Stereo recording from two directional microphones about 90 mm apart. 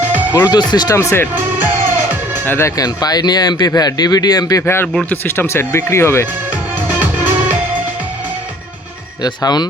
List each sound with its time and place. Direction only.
0.0 s music: 20° right (ahead or behind)
0.3 s speech: 50° left (ahead or behind)
1.3 s music: 20° right (ahead or behind)
2.5 s speech: 25° left (ahead or behind)
2.7 s speech: 45° left (ahead or behind)
4.6 s speech: 25° left (ahead or behind)
6.5 s music: 20° right (ahead or behind)
9.2 s speech: 50° left (ahead or behind)